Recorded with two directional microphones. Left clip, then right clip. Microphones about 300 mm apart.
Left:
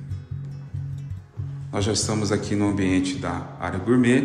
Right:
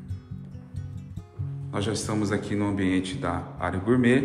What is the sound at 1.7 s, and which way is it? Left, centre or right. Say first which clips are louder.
Speech: left 4 dB; centre.